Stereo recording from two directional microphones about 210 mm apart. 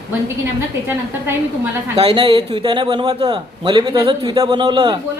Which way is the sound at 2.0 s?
25° right (ahead or behind).